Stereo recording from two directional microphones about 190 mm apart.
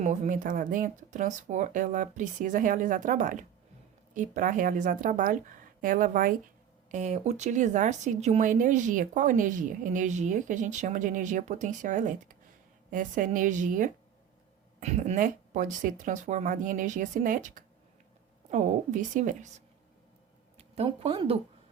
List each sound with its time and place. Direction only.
0.0 s speech: 40° right (ahead or behind)